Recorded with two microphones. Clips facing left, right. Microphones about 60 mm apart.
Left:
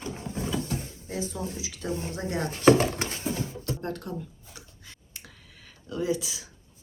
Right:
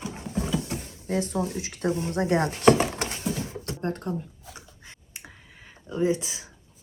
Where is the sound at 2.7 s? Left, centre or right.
Right.